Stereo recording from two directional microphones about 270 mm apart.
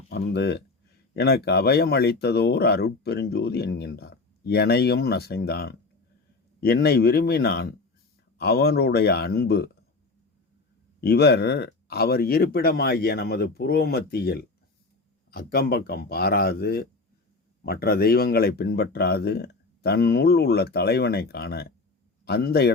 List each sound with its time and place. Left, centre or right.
0.3 s speech: left
11.0 s speech: left